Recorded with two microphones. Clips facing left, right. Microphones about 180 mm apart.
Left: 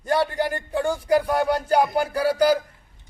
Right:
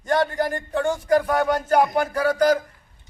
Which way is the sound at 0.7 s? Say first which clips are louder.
Right 1 dB; 10° left (ahead or behind).